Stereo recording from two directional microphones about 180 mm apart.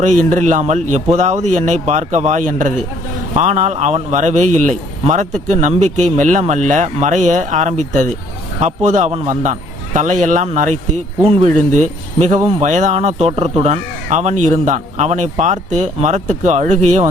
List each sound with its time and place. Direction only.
0.0 s a man's voice: 45° right (ahead or behind)
11.2 s a man's voice: 30° right (ahead or behind)
11.7 s speech: 40° right (ahead or behind)